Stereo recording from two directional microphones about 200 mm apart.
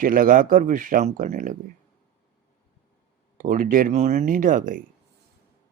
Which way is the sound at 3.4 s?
40° right (ahead or behind).